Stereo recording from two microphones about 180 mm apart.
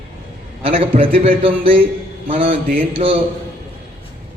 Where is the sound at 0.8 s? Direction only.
30° right (ahead or behind).